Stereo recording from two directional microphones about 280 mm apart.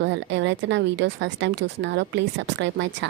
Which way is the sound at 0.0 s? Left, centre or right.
Right.